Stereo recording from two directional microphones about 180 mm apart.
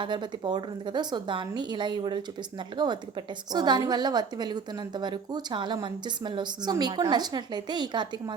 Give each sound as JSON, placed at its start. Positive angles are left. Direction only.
{"t": 0.0, "sound": "a woman's voice", "side_deg": -25}